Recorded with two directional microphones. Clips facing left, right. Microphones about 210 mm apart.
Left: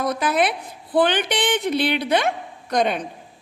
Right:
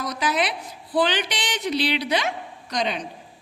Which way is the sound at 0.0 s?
55° left (ahead or behind).